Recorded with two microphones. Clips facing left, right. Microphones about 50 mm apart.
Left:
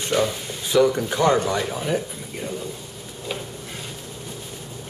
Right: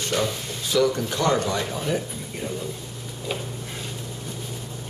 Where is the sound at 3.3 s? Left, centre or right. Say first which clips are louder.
Even; centre.